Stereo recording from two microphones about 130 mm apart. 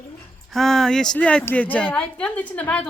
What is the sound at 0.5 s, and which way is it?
A woman's voice, 5° left (ahead or behind).